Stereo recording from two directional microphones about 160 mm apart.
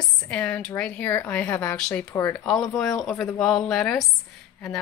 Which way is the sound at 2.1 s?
15° left (ahead or behind).